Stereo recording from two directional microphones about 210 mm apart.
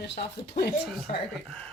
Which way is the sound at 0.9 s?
Centre (ahead or behind).